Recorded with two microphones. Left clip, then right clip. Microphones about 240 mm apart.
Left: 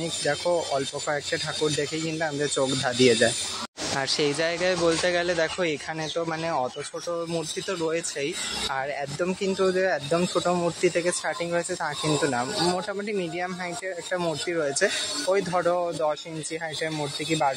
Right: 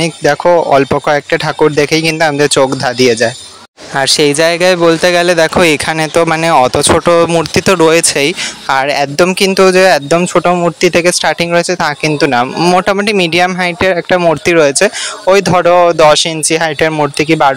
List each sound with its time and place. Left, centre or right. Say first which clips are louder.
0.0 s speech: right 16 dB; right